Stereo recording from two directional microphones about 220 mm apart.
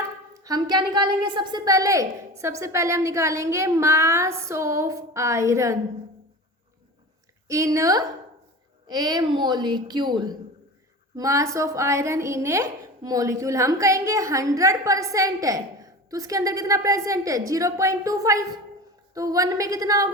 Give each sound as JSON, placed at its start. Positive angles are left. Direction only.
{"t": 0.3, "sound": "a woman's voice", "side_deg": -15}
{"t": 7.4, "sound": "a woman's voice", "side_deg": -15}